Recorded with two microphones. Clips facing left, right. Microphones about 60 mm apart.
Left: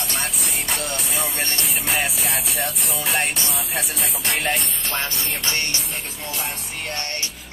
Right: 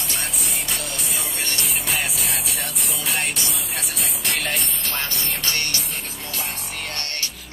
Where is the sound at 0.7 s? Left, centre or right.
Centre.